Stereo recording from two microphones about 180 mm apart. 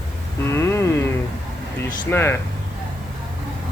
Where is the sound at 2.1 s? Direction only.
15° left (ahead or behind).